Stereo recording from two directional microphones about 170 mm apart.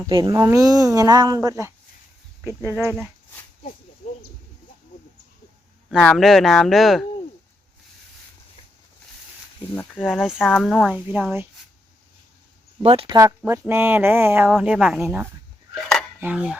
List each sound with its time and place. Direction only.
0.0 s speech: 20° right (ahead or behind)
5.9 s speech: 5° left (ahead or behind)
9.7 s speech: 5° left (ahead or behind)
10.9 s speech: 10° right (ahead or behind)
12.8 s speech: 35° right (ahead or behind)
13.1 s speech: 15° right (ahead or behind)
15.7 s a sound: 5° left (ahead or behind)
16.2 s speech: 5° right (ahead or behind)